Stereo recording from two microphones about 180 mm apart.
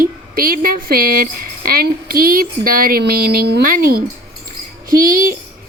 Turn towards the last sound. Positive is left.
turn(degrees=-50)  # may be behind; listen again after turning